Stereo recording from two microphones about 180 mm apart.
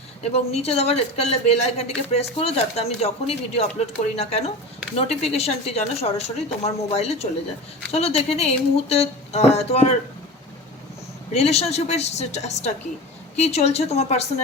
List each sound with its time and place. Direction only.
0.2 s speech: 35° left (ahead or behind)
11.3 s speech: 35° left (ahead or behind)